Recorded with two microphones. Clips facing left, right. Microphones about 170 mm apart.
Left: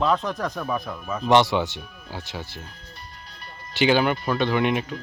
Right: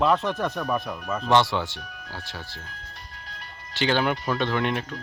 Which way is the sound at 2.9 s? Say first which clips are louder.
Even; 90° right.